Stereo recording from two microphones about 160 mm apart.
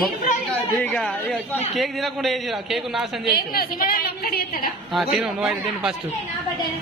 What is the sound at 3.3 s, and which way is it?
A woman's voice, 70° left (ahead or behind).